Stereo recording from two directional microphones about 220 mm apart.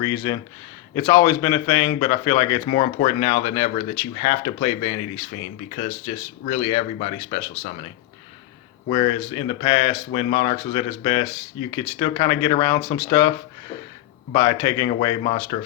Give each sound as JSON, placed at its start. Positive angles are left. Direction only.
{"t": 0.0, "sound": "speech", "side_deg": 15}
{"t": 8.9, "sound": "speech", "side_deg": 25}
{"t": 14.3, "sound": "speech", "side_deg": 15}